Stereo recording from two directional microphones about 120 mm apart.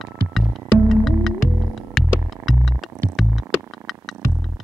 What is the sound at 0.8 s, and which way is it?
Music, centre (ahead or behind).